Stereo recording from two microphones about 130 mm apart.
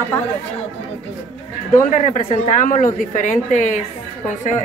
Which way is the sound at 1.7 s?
65° left (ahead or behind).